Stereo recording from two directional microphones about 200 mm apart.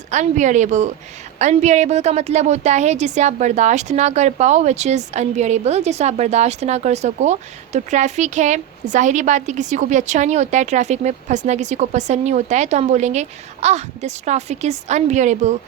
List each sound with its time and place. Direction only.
0.1 s a woman's voice: 35° right (ahead or behind)